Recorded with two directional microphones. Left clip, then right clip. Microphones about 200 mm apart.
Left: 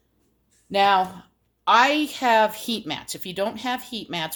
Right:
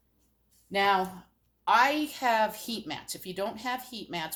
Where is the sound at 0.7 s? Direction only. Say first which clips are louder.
Left 7 dB; 55° left (ahead or behind).